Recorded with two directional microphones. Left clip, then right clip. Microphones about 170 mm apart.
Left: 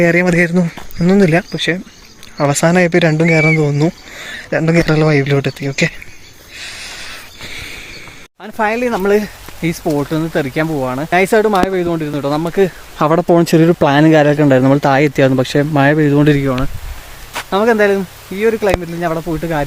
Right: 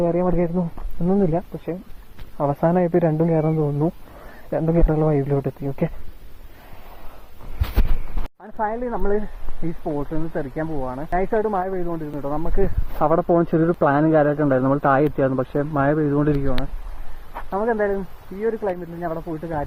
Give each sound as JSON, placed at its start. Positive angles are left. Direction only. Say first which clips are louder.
{"t": 0.0, "sound": "speech", "louder": "left 9 dB", "side_deg": 15}
{"t": 8.5, "sound": "speech", "louder": "left 9 dB", "side_deg": 25}
{"t": 17.5, "sound": "speech", "louder": "left 10 dB", "side_deg": 35}